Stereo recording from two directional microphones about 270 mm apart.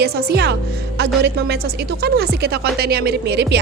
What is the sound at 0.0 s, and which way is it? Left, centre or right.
Speech, right.